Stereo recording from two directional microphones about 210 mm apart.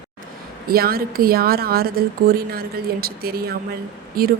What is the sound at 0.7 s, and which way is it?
A woman's voice, 45° right (ahead or behind).